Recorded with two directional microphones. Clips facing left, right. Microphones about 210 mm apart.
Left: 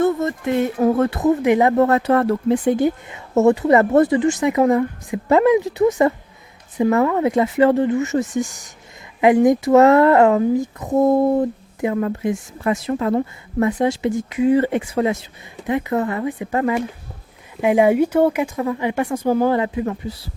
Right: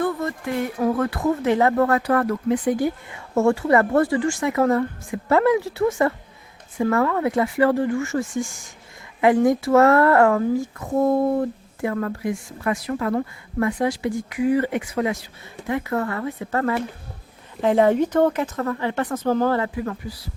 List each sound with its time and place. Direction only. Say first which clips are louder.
0.0 s speech: left 6 dB; 20° left (ahead or behind)